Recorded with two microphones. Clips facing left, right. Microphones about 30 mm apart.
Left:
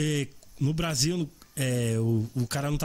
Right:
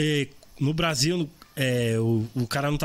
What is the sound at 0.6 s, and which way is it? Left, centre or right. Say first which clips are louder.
Speech: right 4 dB; right.